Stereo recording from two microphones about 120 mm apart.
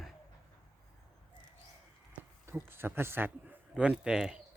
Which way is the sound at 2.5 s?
20° right (ahead or behind).